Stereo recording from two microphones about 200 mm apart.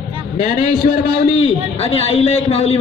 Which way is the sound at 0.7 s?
45° left (ahead or behind).